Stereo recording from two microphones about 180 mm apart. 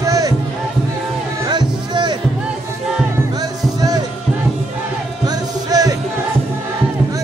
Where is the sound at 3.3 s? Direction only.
20° right (ahead or behind).